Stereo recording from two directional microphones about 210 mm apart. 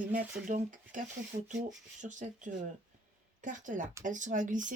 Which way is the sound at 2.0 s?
35° right (ahead or behind).